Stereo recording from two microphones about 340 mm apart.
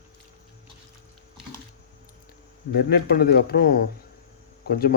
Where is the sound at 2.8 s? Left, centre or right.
Left.